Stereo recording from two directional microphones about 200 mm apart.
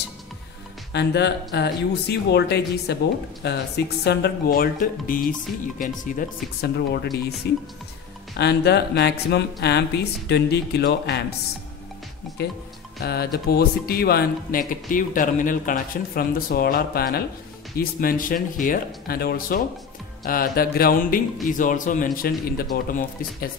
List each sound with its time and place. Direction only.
0.9 s speech: 55° left (ahead or behind)
8.4 s speech: 55° left (ahead or behind)
12.4 s speech: 55° left (ahead or behind)